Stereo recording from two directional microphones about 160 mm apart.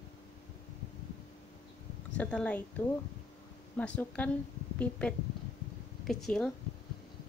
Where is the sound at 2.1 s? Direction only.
10° left (ahead or behind).